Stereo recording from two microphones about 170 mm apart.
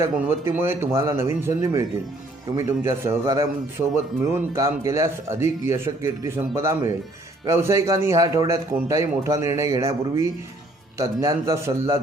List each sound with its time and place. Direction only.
0.0 s a man's voice: 15° right (ahead or behind)